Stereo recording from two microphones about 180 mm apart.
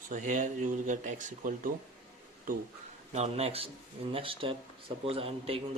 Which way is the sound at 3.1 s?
35° right (ahead or behind).